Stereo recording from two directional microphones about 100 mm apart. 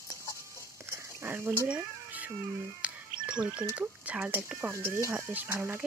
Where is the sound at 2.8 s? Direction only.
10° right (ahead or behind).